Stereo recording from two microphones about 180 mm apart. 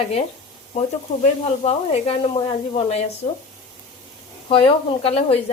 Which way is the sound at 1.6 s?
30° left (ahead or behind).